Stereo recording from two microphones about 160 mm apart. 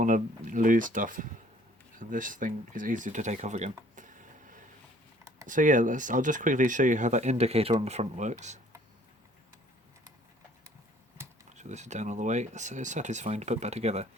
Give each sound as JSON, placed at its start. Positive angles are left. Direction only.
{"t": 0.0, "sound": "speech", "side_deg": -55}
{"t": 11.4, "sound": "speech", "side_deg": -45}